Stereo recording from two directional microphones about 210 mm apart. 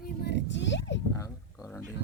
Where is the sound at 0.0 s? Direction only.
50° left (ahead or behind).